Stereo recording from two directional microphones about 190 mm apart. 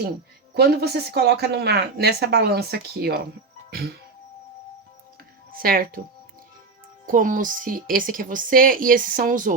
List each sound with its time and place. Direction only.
0.5 s speech: 60° right (ahead or behind)
3.7 s music: 55° right (ahead or behind)
5.5 s speech: 50° right (ahead or behind)
7.1 s speech: 45° right (ahead or behind)